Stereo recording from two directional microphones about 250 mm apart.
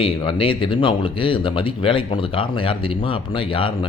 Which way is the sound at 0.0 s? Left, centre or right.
Left.